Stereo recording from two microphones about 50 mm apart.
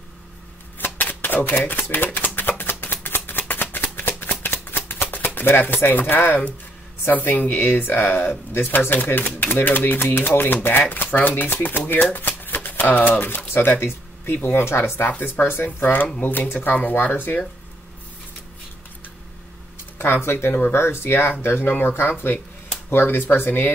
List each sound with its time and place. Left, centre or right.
0.7 s typewriter: left
1.9 s shuffling cards: left
7.1 s speech: left
15.8 s speech: left
20.0 s speech: left